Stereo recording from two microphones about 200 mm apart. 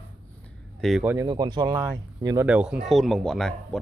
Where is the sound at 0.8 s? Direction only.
5° right (ahead or behind).